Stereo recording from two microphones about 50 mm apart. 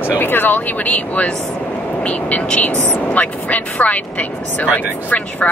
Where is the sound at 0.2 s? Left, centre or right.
Left.